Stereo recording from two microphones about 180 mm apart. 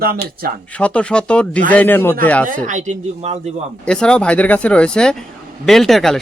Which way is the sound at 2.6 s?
45° right (ahead or behind).